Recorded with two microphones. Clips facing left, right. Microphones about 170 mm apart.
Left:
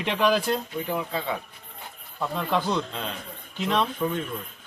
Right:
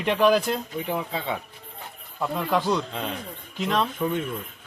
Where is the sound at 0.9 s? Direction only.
25° right (ahead or behind).